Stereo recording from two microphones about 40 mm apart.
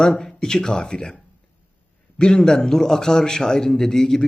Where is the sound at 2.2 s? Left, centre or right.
Centre.